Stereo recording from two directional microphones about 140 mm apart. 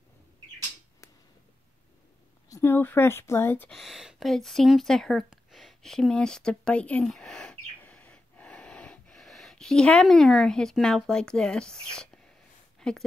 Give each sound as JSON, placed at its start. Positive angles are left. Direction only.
{"t": 2.5, "sound": "speech", "side_deg": 15}
{"t": 3.7, "sound": "speech", "side_deg": 0}